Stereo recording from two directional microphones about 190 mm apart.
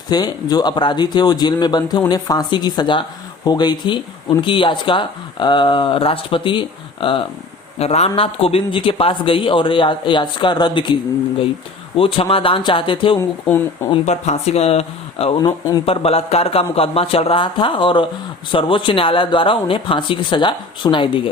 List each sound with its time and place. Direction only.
0.1 s speech: 20° left (ahead or behind)
11.9 s speech: 30° left (ahead or behind)